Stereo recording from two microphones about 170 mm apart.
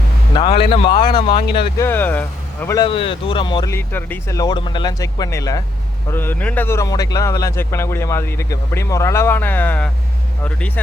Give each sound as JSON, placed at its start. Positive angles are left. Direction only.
{"t": 0.3, "sound": "speech", "side_deg": 30}
{"t": 1.8, "sound": "speech", "side_deg": 10}
{"t": 2.7, "sound": "speech", "side_deg": 30}
{"t": 3.8, "sound": "speech", "side_deg": 15}